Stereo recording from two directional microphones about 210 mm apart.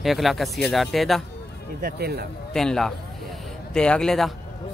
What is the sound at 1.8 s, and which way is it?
Speech, 50° right (ahead or behind).